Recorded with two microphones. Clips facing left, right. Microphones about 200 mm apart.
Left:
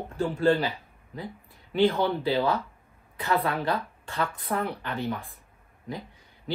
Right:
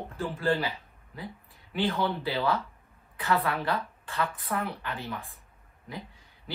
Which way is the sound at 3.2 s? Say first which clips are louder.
Left 1 dB; 30° left (ahead or behind).